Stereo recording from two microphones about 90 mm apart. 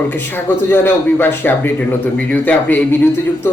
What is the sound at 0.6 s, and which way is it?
A man's voice, 25° left (ahead or behind).